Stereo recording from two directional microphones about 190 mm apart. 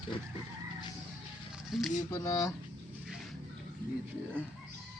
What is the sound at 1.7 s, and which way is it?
Speech, centre (ahead or behind).